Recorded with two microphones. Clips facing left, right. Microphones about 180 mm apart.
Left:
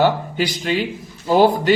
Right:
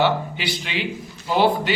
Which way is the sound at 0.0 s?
45° left (ahead or behind).